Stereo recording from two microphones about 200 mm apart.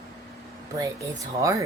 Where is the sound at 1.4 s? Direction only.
15° right (ahead or behind).